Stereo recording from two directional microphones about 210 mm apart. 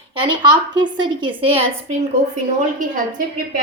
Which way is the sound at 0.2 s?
20° right (ahead or behind).